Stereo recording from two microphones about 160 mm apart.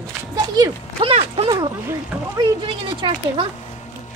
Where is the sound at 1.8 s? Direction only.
15° right (ahead or behind).